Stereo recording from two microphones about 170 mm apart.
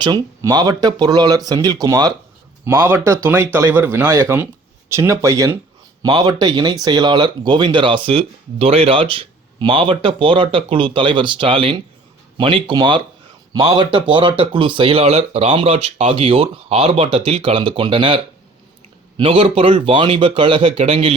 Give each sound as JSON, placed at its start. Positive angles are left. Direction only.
{"t": 0.0, "sound": "speech", "side_deg": -25}